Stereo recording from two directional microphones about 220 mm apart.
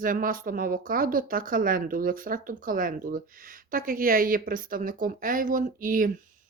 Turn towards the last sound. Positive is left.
turn(degrees=-40)  # may be behind; listen again after turning